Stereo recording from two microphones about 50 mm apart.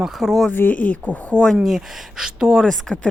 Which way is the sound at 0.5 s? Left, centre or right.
Left.